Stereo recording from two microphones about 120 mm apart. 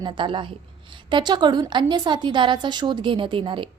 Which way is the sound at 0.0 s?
40° right (ahead or behind).